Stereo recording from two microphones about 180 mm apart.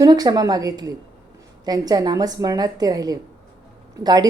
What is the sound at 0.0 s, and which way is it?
A woman's voice, 20° right (ahead or behind).